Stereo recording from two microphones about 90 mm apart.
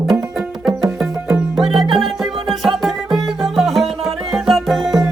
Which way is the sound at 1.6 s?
5° right (ahead or behind).